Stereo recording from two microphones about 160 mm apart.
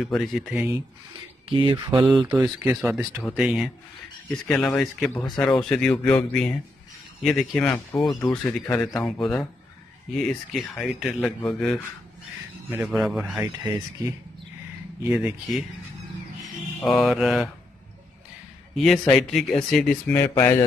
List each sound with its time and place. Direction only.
0.0 s speech: centre (ahead or behind)
1.5 s speech: 30° right (ahead or behind)
2.4 s speech: 10° right (ahead or behind)
12.8 s speech: 5° right (ahead or behind)
15.0 s speech: 10° right (ahead or behind)
16.8 s speech: centre (ahead or behind)
18.8 s speech: centre (ahead or behind)
20.1 s speech: 15° left (ahead or behind)